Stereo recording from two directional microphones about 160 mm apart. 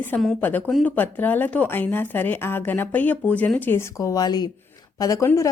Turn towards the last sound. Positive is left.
turn(degrees=20)  # may be behind; listen again after turning